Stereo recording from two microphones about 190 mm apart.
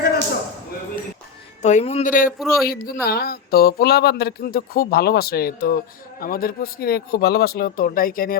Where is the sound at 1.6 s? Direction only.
35° left (ahead or behind).